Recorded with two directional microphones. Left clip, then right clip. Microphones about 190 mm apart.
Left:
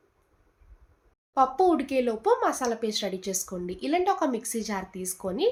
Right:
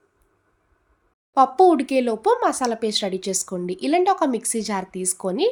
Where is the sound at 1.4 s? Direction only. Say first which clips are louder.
Right 7 dB; 55° right (ahead or behind).